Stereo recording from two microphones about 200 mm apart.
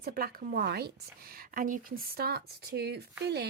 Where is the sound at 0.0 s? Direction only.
50° right (ahead or behind).